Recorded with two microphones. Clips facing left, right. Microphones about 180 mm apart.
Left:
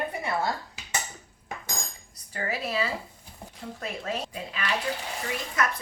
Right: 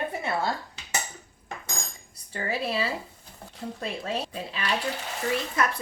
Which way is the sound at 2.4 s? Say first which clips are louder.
Right 1 dB; 30° right (ahead or behind).